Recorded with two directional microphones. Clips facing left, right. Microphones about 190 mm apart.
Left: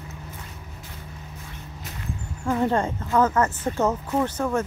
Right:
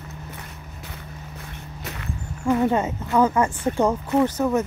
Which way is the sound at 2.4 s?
5° right (ahead or behind).